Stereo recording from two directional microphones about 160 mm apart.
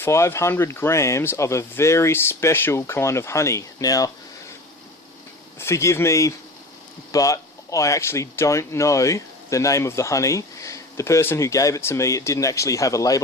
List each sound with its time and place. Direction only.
0.0 s speech: 15° left (ahead or behind)
5.5 s speech: 15° left (ahead or behind)